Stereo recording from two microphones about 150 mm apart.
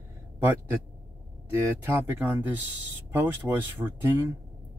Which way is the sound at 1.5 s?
15° right (ahead or behind).